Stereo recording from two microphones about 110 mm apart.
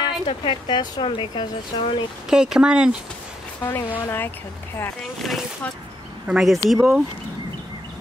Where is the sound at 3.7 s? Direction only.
20° left (ahead or behind).